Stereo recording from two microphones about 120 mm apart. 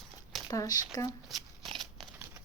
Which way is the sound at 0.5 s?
30° left (ahead or behind).